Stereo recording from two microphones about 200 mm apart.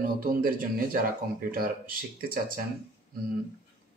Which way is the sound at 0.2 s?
45° right (ahead or behind).